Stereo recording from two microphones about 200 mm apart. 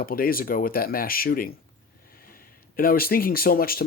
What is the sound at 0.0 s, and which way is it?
Speech, 45° left (ahead or behind).